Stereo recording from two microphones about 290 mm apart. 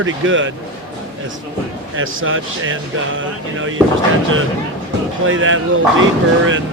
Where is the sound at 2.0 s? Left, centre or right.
Right.